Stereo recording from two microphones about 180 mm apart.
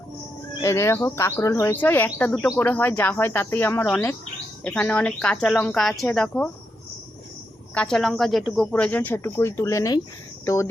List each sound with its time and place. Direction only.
0.6 s speech: 15° left (ahead or behind)
7.7 s speech: 5° left (ahead or behind)